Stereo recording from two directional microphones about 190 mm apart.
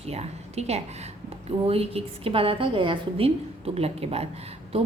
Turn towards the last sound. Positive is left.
turn(degrees=-35)  # may be behind; listen again after turning